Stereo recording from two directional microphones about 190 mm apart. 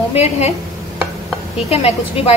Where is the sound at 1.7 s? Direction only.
35° left (ahead or behind).